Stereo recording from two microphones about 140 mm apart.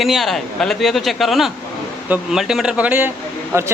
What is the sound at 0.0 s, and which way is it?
Speech, centre (ahead or behind).